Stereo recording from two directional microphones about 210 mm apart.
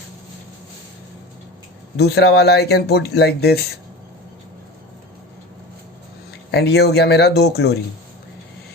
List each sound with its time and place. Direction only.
2.0 s speech: 50° left (ahead or behind)
6.5 s speech: 50° left (ahead or behind)